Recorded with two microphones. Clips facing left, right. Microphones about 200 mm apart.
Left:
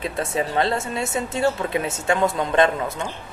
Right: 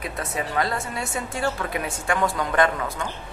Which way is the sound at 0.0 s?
25° left (ahead or behind).